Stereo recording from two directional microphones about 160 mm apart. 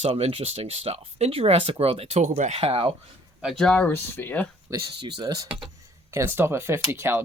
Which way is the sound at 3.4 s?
Centre (ahead or behind).